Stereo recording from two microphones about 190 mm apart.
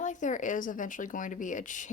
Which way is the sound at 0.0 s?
40° left (ahead or behind).